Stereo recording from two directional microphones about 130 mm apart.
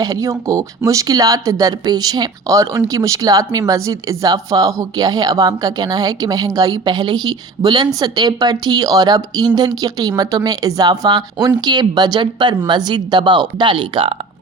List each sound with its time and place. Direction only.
0.0 s speech: 25° right (ahead or behind); by 14.1 s 40° right (ahead or behind)